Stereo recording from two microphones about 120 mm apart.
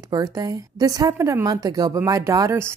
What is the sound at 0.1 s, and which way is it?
Speech, 30° right (ahead or behind).